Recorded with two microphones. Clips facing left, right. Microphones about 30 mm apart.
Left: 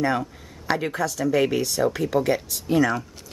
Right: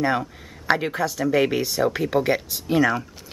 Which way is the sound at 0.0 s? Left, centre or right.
Centre.